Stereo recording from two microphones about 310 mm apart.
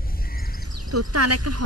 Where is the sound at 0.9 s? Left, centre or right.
Right.